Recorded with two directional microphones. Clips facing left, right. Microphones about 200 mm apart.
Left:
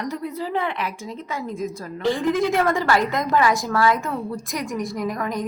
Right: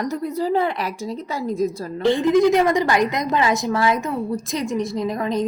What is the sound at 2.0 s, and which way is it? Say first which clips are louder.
A woman's voice: right 5 dB; 25° right (ahead or behind).